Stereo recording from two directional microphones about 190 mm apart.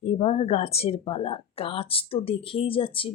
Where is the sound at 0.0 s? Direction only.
35° left (ahead or behind).